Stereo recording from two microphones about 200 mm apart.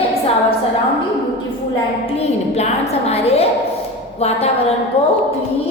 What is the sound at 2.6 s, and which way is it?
Speech, 30° left (ahead or behind).